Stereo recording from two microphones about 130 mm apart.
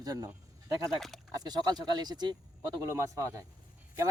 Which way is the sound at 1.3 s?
30° right (ahead or behind).